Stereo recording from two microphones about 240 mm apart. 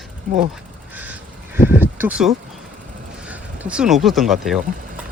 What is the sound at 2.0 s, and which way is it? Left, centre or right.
Speech, centre.